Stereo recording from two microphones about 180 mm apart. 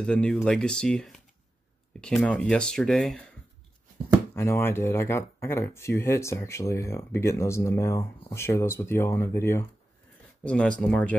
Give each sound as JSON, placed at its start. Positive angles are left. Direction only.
{"t": 0.0, "sound": "speech", "side_deg": 5}
{"t": 4.4, "sound": "speech", "side_deg": 15}